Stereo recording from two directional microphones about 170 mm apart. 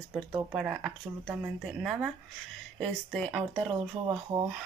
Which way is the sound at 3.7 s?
30° right (ahead or behind).